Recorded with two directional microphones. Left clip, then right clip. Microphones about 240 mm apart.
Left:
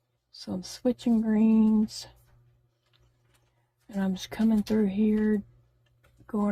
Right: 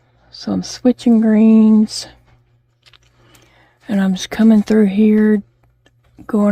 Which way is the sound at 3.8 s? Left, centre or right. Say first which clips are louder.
Right 14 dB; right.